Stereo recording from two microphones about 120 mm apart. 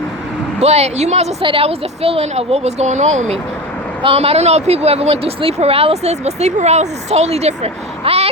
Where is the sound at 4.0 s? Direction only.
55° right (ahead or behind).